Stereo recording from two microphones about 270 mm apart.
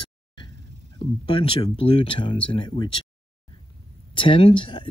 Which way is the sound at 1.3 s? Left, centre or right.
Centre.